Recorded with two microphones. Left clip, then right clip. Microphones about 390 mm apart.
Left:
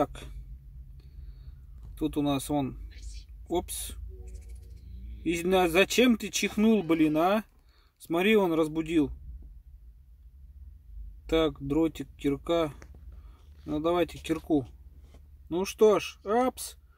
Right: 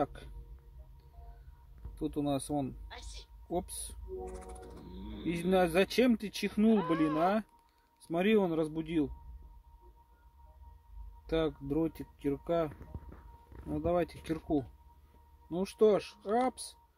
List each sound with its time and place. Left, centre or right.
0.0 s speech: centre
2.0 s speech: centre
5.2 s speech: centre
11.2 s speech: centre